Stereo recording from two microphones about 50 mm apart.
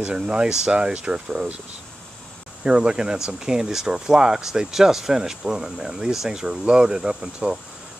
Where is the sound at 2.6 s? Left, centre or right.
Centre.